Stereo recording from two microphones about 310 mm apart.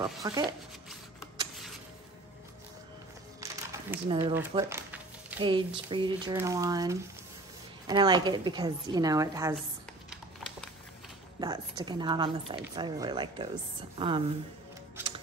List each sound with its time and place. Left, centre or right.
0.2 s speech: centre
3.3 s a sound: centre
5.9 s speech: centre
10.0 s a sound: centre
11.3 s speech: centre
15.0 s music: centre